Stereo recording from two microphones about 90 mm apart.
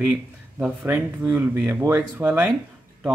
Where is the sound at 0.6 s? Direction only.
20° right (ahead or behind).